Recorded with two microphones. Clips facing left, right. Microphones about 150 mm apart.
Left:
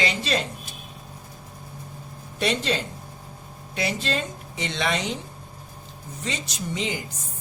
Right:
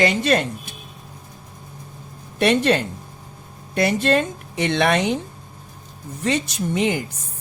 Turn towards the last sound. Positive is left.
turn(degrees=-60)  # may be behind; listen again after turning